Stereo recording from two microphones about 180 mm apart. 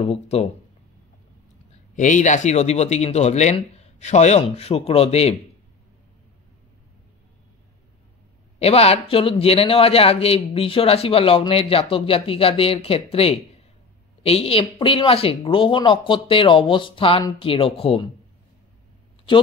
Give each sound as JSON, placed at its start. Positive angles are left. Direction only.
{"t": 0.0, "sound": "speech", "side_deg": 35}
{"t": 2.0, "sound": "speech", "side_deg": 45}
{"t": 8.5, "sound": "speech", "side_deg": 35}